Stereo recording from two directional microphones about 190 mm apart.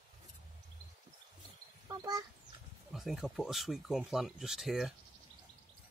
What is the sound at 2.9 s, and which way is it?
Speech, centre (ahead or behind).